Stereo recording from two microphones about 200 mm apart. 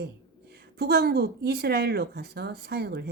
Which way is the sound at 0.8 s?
55° right (ahead or behind).